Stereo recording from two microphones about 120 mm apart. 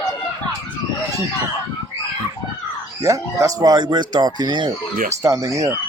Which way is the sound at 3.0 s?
25° right (ahead or behind).